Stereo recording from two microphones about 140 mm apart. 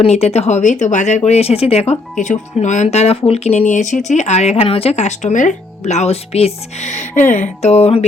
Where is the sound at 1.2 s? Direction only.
50° left (ahead or behind).